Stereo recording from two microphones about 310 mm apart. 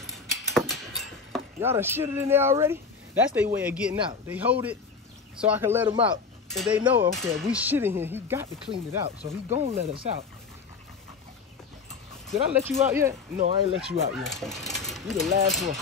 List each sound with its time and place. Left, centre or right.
0.1 s a sound: centre
1.3 s speech: centre
8.6 s speech: centre
12.3 s speech: centre
13.4 s speech: centre
14.2 s speech: centre